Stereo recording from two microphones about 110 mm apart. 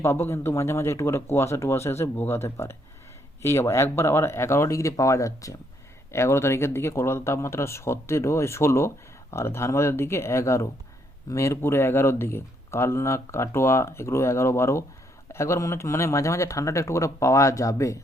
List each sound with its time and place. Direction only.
0.0 s speech: 25° left (ahead or behind)